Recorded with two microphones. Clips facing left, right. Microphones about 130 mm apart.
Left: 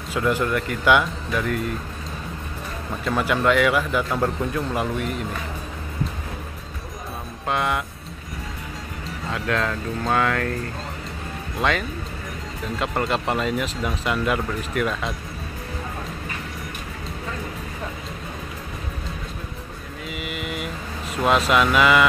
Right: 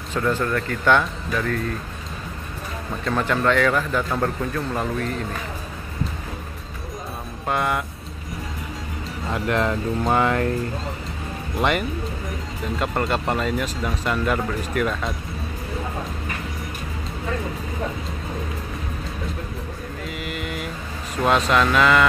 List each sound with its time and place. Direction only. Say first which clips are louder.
0.1 s speech: even; 10° left (ahead or behind)
2.9 s speech: even; 5° left (ahead or behind)
7.4 s speech: right 1 dB; centre (ahead or behind)
9.3 s speech: right 3 dB; 20° right (ahead or behind)
12.7 s speech: even; centre (ahead or behind)
20.1 s mantra: left 1 dB; 5° left (ahead or behind)
21.2 s speech: even; 5° left (ahead or behind)